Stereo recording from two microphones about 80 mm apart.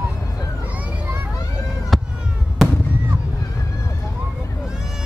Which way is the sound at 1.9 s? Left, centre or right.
Centre.